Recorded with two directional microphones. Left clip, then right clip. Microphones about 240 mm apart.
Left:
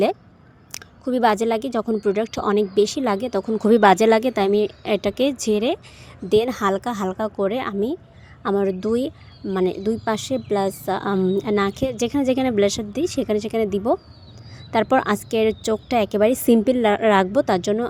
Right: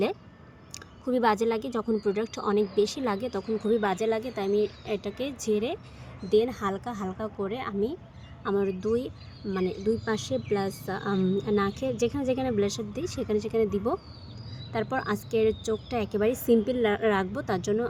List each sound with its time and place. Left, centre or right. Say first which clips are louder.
0.7 s a woman's voice: left 5 dB; left